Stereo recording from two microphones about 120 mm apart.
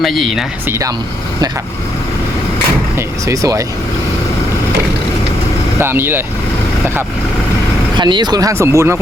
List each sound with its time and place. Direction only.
0.0 s speech: centre (ahead or behind)
3.2 s speech: 30° right (ahead or behind)
5.8 s speech: 20° right (ahead or behind)
7.9 s speech: 40° right (ahead or behind); by 9.0 s 20° right (ahead or behind)